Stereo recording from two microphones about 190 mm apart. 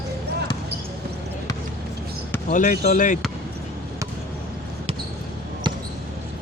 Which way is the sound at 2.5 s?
40° left (ahead or behind).